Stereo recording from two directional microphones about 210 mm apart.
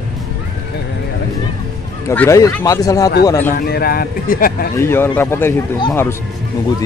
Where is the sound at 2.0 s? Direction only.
15° left (ahead or behind).